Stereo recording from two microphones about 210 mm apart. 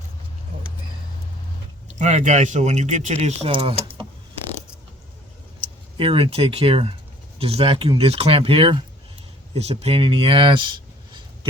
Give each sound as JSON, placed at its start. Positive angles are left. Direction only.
{"t": 1.9, "sound": "speech", "side_deg": -35}
{"t": 6.0, "sound": "speech", "side_deg": -25}